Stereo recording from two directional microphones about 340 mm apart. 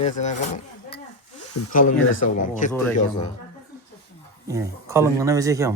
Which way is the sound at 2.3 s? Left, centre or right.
Left.